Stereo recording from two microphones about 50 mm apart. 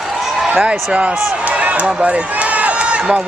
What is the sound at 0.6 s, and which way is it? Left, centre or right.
Speech, right.